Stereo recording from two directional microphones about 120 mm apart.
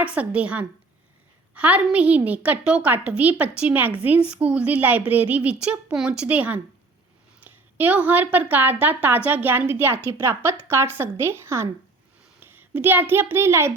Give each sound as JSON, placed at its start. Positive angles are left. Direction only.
{"t": 0.0, "sound": "a woman's voice", "side_deg": -10}